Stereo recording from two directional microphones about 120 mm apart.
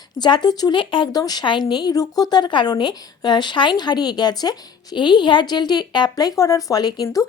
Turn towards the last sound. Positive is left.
turn(degrees=30)  # may be behind; listen again after turning